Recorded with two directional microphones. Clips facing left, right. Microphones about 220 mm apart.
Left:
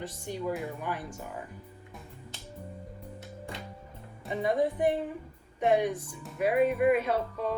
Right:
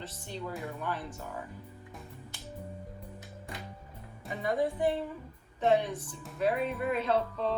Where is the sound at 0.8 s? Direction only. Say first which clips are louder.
Left 1 dB; 15° left (ahead or behind).